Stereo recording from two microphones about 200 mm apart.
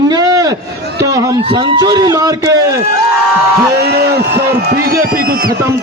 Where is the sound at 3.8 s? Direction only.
55° right (ahead or behind).